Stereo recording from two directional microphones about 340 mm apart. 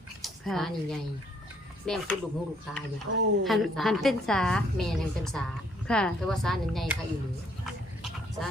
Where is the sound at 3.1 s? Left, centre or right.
Right.